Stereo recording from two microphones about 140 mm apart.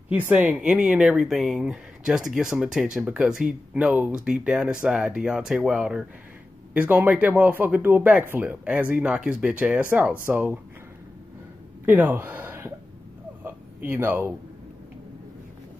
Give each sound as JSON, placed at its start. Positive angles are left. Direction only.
{"t": 0.1, "sound": "speech", "side_deg": -10}
{"t": 11.8, "sound": "speech", "side_deg": -15}
{"t": 13.4, "sound": "a sound", "side_deg": -15}